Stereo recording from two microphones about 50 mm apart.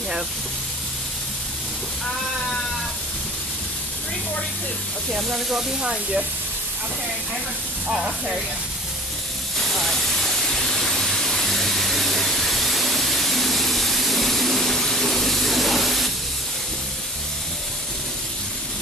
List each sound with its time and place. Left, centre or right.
5.1 s speech: centre
7.9 s speech: centre
9.7 s steam: centre